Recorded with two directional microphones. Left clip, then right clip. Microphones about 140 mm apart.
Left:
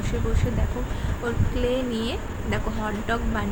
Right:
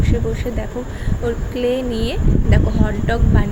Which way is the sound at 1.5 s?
20° right (ahead or behind).